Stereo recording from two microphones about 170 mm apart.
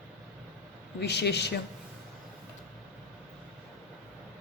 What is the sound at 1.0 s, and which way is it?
Speech, 80° left.